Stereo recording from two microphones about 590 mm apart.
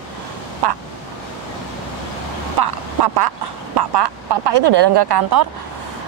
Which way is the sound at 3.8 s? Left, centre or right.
Right.